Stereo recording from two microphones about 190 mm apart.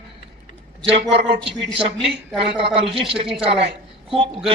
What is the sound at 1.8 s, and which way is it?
Speech, centre (ahead or behind).